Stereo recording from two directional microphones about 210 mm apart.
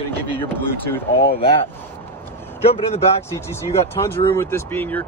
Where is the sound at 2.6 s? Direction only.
30° left (ahead or behind).